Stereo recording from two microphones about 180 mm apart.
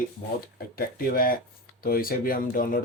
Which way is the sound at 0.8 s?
55° left (ahead or behind).